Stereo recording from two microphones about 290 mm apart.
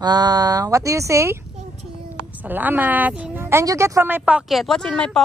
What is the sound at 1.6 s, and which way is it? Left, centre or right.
Child singing, right.